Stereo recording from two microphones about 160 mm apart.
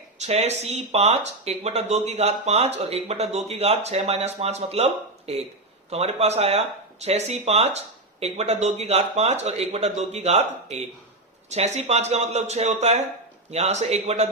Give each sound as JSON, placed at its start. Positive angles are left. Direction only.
{"t": 0.2, "sound": "speech", "side_deg": -45}